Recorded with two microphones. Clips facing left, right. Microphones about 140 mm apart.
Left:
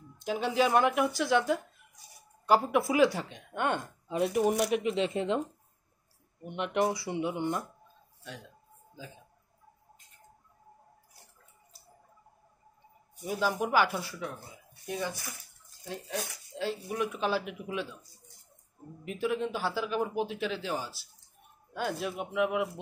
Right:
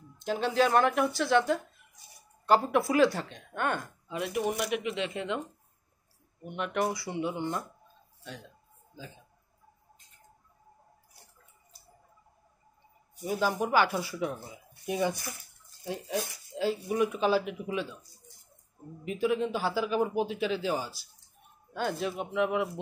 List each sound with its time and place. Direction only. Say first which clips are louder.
0.2 s speech: right 1 dB; 10° left (ahead or behind)
4.1 s speech: left 4 dB; 35° left (ahead or behind)
6.4 s speech: left 1 dB; 25° left (ahead or behind)
13.2 s speech: right 1 dB; centre (ahead or behind)
14.9 s speech: right 5 dB; 15° right (ahead or behind); by 17.8 s centre (ahead or behind)
19.0 s speech: right 3 dB; centre (ahead or behind)